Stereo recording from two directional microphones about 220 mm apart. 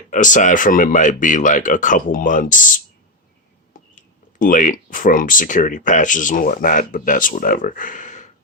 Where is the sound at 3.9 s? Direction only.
35° left (ahead or behind).